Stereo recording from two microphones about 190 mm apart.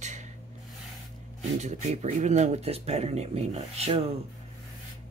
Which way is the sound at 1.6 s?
35° right (ahead or behind).